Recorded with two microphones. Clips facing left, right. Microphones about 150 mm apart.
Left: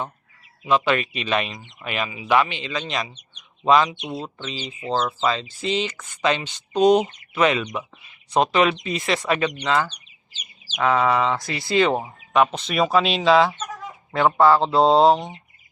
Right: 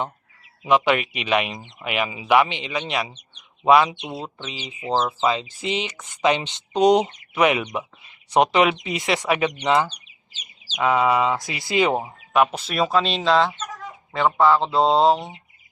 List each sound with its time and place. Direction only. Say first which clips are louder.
0.7 s speech: right 1 dB; 15° right (ahead or behind)